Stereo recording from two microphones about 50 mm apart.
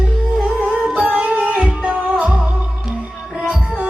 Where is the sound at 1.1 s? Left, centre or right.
Right.